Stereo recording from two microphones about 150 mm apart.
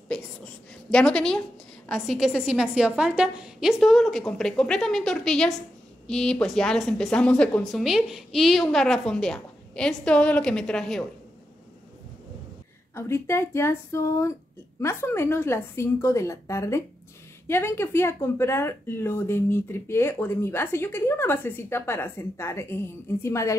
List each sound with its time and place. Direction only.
0.9 s a woman's voice: 5° left (ahead or behind)
12.9 s speech: 15° left (ahead or behind)